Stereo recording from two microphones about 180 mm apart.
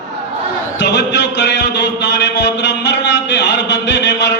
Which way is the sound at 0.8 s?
75° left (ahead or behind).